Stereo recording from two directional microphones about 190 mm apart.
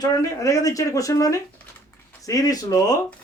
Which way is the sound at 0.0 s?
20° left (ahead or behind).